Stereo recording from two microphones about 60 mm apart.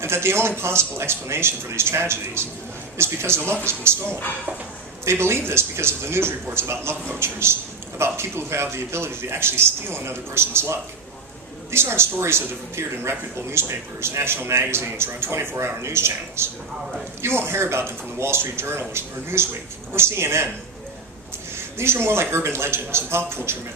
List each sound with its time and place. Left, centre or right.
0.0 s a man's voice: right
21.8 s a man's voice: right